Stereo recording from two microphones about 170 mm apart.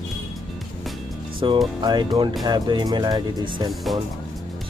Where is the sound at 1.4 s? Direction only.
30° right (ahead or behind).